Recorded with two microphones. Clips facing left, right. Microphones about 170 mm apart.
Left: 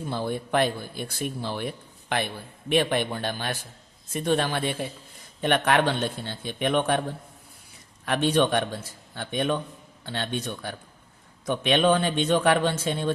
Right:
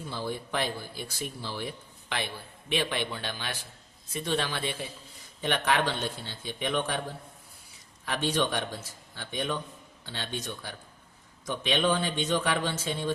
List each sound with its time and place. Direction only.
0.1 s a man's voice: 55° left (ahead or behind)
8.0 s a man's voice: 60° left (ahead or behind)